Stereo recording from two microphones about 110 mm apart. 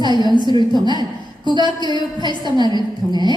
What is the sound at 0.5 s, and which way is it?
Speech, 40° right (ahead or behind).